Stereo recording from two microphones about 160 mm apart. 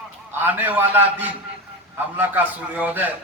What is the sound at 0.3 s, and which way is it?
A man's voice, 10° right (ahead or behind).